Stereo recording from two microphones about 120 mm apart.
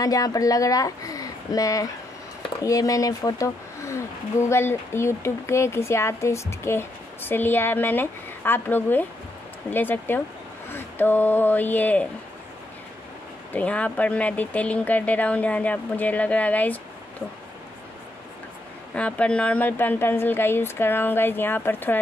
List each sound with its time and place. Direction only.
0.0 s a woman's voice: 30° left (ahead or behind); by 12.1 s 15° left (ahead or behind)
13.5 s speech: 10° left (ahead or behind)
18.9 s speech: 10° left (ahead or behind)